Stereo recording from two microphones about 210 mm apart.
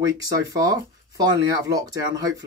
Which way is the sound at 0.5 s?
15° right (ahead or behind).